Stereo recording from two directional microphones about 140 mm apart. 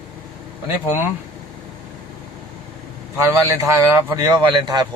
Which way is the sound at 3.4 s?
20° right (ahead or behind).